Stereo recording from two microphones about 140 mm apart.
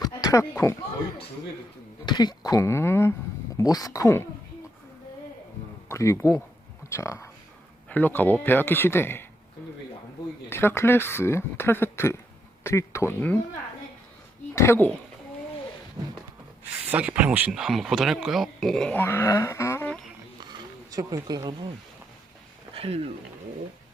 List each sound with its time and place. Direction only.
0.0 s a sound: 25° left (ahead or behind)
2.0 s speech: 30° left (ahead or behind)
5.9 s speech: 20° left (ahead or behind)
10.5 s speech: 15° left (ahead or behind)
14.5 s speech: 20° left (ahead or behind)
16.7 s speech: 10° right (ahead or behind); by 19.9 s 20° left (ahead or behind)
20.4 s a sound: 30° right (ahead or behind)
22.7 s speech: 45° right (ahead or behind)